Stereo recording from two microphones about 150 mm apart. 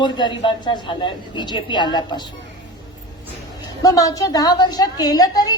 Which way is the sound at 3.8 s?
25° left (ahead or behind).